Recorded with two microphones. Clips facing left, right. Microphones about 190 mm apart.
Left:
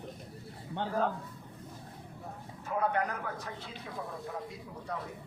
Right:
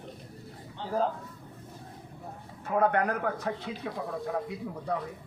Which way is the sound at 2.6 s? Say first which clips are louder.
Right 6 dB; 60° right (ahead or behind).